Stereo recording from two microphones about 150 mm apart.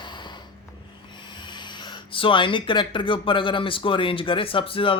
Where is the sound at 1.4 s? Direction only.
30° left (ahead or behind).